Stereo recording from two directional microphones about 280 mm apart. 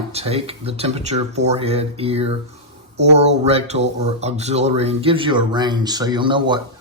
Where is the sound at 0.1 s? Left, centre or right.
Right.